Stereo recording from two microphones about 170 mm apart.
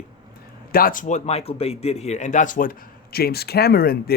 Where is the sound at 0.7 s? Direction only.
55° left (ahead or behind).